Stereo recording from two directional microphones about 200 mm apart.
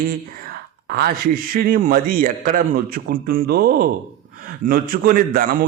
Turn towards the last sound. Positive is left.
turn(degrees=-45)  # may be behind; listen again after turning